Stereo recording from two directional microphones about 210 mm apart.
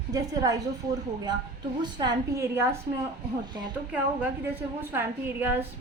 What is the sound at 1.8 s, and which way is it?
Speech, 20° right (ahead or behind).